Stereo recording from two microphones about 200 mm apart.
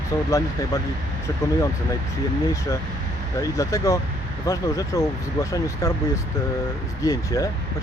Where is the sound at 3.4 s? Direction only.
15° left (ahead or behind).